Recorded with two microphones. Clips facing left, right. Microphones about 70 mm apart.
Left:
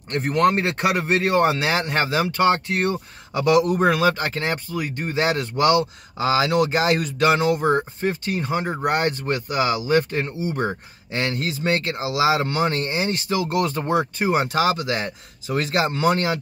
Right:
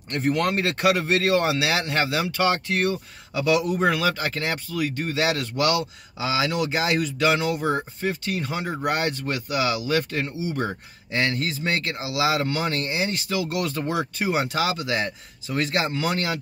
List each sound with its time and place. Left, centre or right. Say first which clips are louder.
0.4 s speech: left 8 dB; left
2.9 s speech: left 2 dB; left
3.8 s speech: left 4 dB; left
8.1 s speech: left 3 dB; left
11.1 s speech: even; left